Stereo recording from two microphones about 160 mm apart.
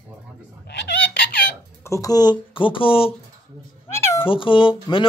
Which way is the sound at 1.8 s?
20° left (ahead or behind).